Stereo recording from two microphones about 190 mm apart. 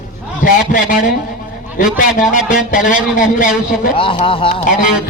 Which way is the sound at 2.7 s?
45° left (ahead or behind).